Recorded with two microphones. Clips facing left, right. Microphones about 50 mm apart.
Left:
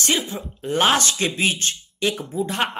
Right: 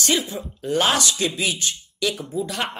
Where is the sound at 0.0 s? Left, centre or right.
Left.